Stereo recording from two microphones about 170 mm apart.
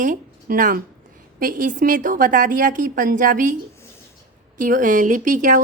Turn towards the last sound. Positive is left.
turn(degrees=-50)  # may be behind; listen again after turning